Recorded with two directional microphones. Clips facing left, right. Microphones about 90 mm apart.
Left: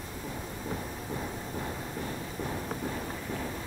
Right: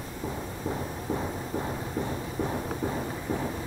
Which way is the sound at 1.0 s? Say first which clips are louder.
Right 5 dB; 20° right (ahead or behind).